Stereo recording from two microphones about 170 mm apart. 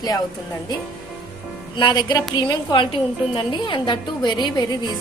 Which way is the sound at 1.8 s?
25° left (ahead or behind).